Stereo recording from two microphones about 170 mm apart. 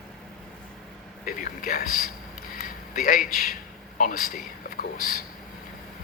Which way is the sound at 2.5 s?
55° left (ahead or behind).